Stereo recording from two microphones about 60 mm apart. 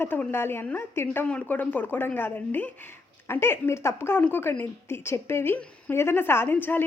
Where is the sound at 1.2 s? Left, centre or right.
Left.